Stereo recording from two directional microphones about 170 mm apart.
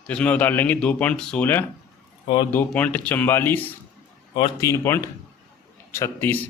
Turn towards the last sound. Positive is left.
turn(degrees=15)  # may be behind; listen again after turning